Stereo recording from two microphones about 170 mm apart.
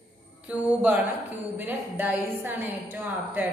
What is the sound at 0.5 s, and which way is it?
A woman's voice, 5° right (ahead or behind).